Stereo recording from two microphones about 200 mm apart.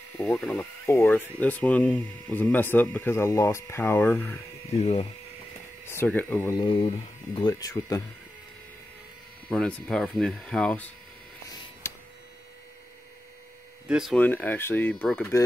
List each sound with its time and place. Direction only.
0.2 s speech: 5° left (ahead or behind)
0.8 s speech: 15° left (ahead or behind)
5.9 s speech: 10° left (ahead or behind)
9.5 s speech: 5° left (ahead or behind)
11.4 s a sound: 15° left (ahead or behind)
13.8 s speech: 5° right (ahead or behind)
14.1 s speech: 10° left (ahead or behind)